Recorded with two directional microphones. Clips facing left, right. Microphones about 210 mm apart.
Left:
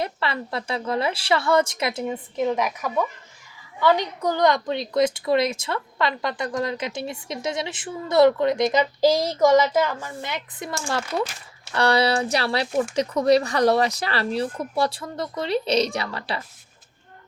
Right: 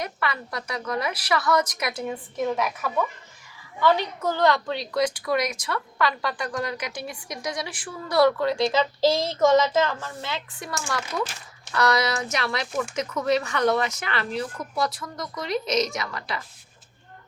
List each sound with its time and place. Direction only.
0.0 s a woman's voice: 30° left (ahead or behind)
2.4 s a woman's voice: 15° left (ahead or behind); by 16.4 s 30° left (ahead or behind)